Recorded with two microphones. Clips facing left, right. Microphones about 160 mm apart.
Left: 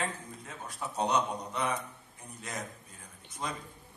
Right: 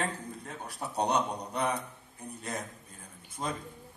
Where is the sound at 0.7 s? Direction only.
35° right (ahead or behind).